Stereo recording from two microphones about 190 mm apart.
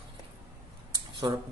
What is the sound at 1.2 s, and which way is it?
Speech, 20° right (ahead or behind).